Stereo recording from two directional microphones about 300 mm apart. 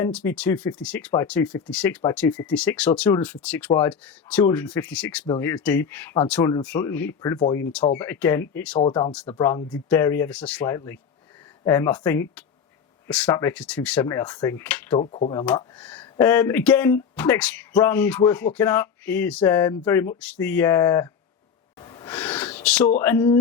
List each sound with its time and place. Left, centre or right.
0.0 s speech: centre
8.8 s speech: centre
14.9 s speech: centre
15.4 s speech: centre
21.8 s gasp: centre
22.1 s a sound: centre
23.0 s speech: centre